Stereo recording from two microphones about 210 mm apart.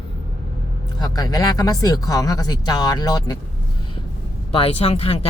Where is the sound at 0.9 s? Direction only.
20° left (ahead or behind).